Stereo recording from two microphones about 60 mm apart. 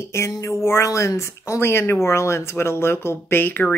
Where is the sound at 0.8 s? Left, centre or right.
Left.